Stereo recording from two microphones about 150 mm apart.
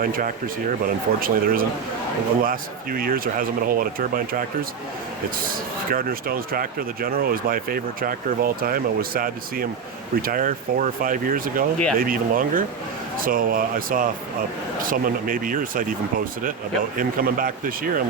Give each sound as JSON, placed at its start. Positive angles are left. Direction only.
{"t": 0.0, "sound": "speech", "side_deg": -70}
{"t": 5.9, "sound": "speech", "side_deg": -75}
{"t": 17.0, "sound": "speech", "side_deg": -70}